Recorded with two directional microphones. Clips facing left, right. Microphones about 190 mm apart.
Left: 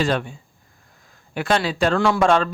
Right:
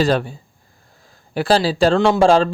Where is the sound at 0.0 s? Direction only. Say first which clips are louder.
Right 4 dB; 35° right (ahead or behind).